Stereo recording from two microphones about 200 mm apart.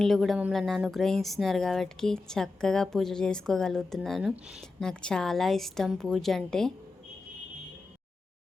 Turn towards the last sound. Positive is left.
turn(degrees=0)  # may be behind; listen again after turning